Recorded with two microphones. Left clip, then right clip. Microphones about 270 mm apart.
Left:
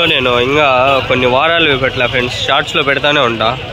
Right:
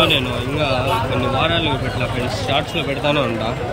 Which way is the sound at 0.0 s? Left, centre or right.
Left.